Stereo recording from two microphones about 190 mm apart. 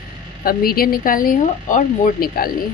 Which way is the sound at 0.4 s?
50° left (ahead or behind).